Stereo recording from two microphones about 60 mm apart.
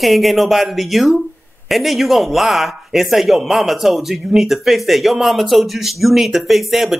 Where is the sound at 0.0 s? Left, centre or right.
Centre.